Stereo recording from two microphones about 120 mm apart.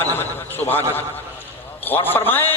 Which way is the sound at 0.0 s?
15° left (ahead or behind).